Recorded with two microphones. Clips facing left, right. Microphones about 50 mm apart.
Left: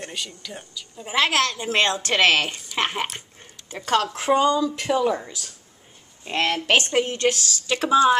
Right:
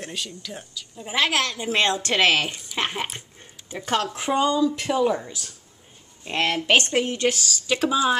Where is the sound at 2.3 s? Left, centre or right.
Left.